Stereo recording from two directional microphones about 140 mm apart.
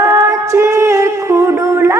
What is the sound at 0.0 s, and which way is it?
Music, 20° right (ahead or behind).